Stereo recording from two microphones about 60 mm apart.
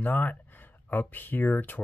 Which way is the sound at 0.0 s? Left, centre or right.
Left.